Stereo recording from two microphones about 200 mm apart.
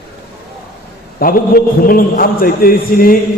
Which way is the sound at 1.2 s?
45° left (ahead or behind).